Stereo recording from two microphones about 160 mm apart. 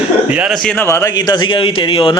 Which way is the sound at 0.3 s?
10° right (ahead or behind).